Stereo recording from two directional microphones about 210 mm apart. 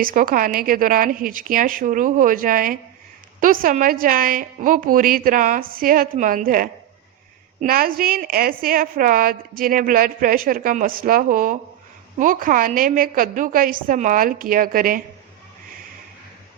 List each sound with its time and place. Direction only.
0.0 s a woman's voice: 40° right (ahead or behind)